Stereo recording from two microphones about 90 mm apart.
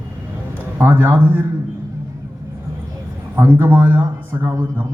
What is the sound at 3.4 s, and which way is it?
A man's voice, 20° right (ahead or behind).